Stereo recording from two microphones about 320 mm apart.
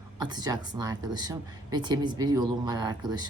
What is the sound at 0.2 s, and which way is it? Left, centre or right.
Speech, centre.